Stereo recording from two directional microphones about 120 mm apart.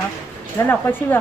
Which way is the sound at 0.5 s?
15° left (ahead or behind).